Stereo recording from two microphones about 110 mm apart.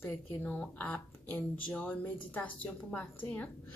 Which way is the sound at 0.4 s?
10° left (ahead or behind).